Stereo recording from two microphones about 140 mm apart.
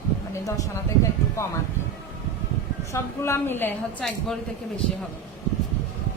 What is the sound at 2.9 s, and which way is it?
A woman's voice, 20° left (ahead or behind).